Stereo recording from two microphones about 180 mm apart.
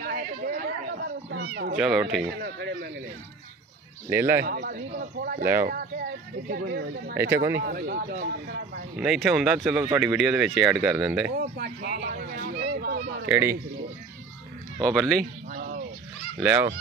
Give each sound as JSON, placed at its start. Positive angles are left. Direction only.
{"t": 0.4, "sound": "a sound", "side_deg": -50}
{"t": 1.8, "sound": "speech", "side_deg": -5}
{"t": 2.4, "sound": "a man's voice", "side_deg": -65}
{"t": 4.1, "sound": "speech", "side_deg": -15}
{"t": 4.5, "sound": "speech", "side_deg": -60}
{"t": 6.5, "sound": "speech", "side_deg": -65}
{"t": 7.2, "sound": "speech", "side_deg": -15}
{"t": 7.5, "sound": "speech", "side_deg": -60}
{"t": 8.9, "sound": "speech", "side_deg": -5}
{"t": 11.3, "sound": "speech", "side_deg": -60}
{"t": 13.3, "sound": "speech", "side_deg": -10}
{"t": 14.8, "sound": "speech", "side_deg": 0}
{"t": 15.5, "sound": "bird", "side_deg": -45}
{"t": 16.3, "sound": "speech", "side_deg": -10}